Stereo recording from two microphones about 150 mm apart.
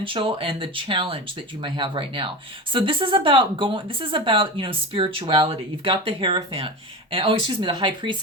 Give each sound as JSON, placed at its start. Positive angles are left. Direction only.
{"t": 0.0, "sound": "speech", "side_deg": -35}